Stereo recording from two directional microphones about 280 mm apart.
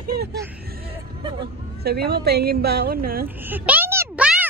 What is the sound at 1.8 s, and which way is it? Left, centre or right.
A woman's voice, right.